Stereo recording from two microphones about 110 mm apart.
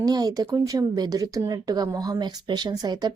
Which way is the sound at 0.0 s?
35° right (ahead or behind).